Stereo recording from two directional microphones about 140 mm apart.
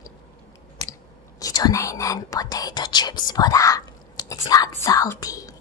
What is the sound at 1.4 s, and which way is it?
Whispering, 25° left (ahead or behind).